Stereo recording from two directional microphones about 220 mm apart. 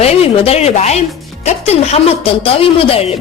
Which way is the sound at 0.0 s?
30° left (ahead or behind).